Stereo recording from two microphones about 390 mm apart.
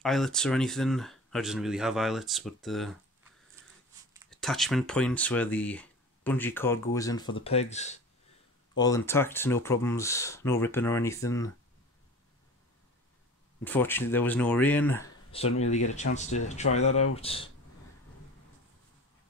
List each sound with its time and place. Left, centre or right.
0.0 s speech: centre
4.1 s speech: centre
13.7 s speech: centre